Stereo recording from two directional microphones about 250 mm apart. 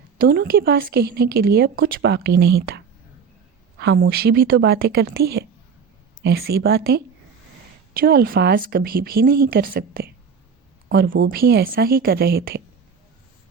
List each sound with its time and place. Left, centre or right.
0.2 s a woman's voice: right